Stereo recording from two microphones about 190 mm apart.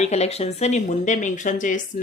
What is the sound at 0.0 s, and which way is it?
Speech, 35° left (ahead or behind).